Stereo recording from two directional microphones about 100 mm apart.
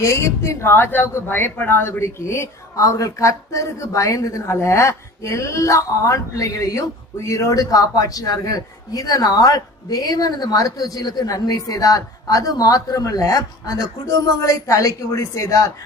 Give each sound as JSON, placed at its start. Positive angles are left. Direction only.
{"t": 0.0, "sound": "a woman's voice", "side_deg": 30}